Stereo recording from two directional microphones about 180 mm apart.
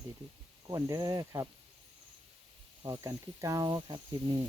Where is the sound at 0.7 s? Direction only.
20° right (ahead or behind).